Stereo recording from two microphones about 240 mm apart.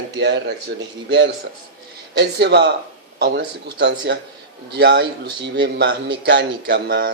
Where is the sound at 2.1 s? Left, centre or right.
Right.